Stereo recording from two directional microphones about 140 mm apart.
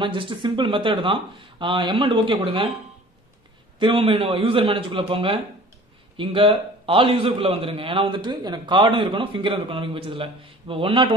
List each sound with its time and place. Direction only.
0.0 s a man's voice: 35° right (ahead or behind)
3.8 s a man's voice: 40° right (ahead or behind)